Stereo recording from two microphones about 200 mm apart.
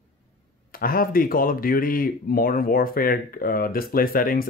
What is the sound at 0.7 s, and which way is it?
Speech, 45° left (ahead or behind).